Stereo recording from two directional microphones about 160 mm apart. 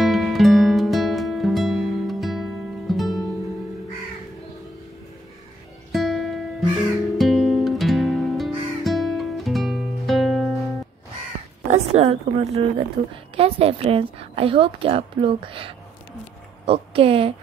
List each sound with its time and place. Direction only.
0.0 s music: centre (ahead or behind)
5.9 s music: centre (ahead or behind)
11.6 s a woman's voice: 45° right (ahead or behind)